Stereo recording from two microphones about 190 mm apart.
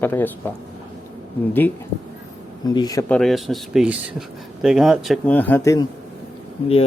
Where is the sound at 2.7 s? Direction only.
20° left (ahead or behind).